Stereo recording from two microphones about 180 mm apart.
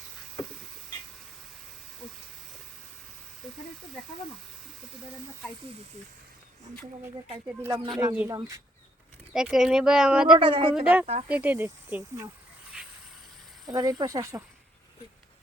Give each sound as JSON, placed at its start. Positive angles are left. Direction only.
{"t": 7.7, "sound": "speech", "side_deg": -25}
{"t": 8.0, "sound": "speech", "side_deg": -10}
{"t": 8.3, "sound": "speech", "side_deg": -20}
{"t": 9.3, "sound": "speech", "side_deg": -5}
{"t": 10.4, "sound": "speech", "side_deg": -30}
{"t": 11.3, "sound": "speech", "side_deg": -10}
{"t": 12.7, "sound": "a sound", "side_deg": -5}
{"t": 13.7, "sound": "speech", "side_deg": -20}